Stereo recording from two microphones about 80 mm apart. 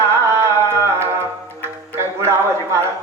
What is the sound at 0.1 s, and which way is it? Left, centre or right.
Music, right.